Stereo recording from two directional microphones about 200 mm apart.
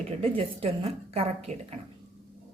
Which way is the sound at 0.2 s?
30° right (ahead or behind).